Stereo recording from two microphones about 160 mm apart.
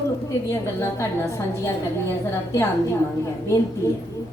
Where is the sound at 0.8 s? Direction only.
20° left (ahead or behind).